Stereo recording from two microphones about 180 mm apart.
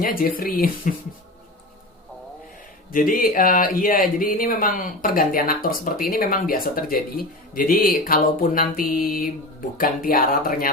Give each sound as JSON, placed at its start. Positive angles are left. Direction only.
{"t": 0.0, "sound": "speech", "side_deg": 55}
{"t": 2.9, "sound": "speech", "side_deg": 50}